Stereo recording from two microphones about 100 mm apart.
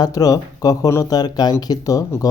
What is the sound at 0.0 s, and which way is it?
Speech, 40° left (ahead or behind).